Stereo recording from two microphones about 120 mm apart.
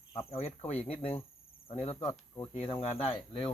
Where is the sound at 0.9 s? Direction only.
50° left (ahead or behind).